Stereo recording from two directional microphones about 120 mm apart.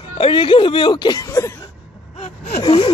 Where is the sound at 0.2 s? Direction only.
45° left (ahead or behind); by 1.5 s 30° left (ahead or behind).